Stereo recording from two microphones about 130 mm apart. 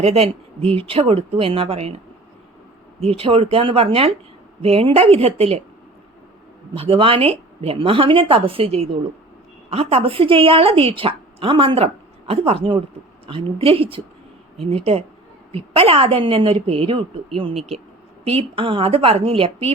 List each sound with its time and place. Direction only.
0.0 s a woman's voice: 50° right (ahead or behind)
3.0 s a woman's voice: 50° right (ahead or behind)
6.7 s a woman's voice: 45° right (ahead or behind)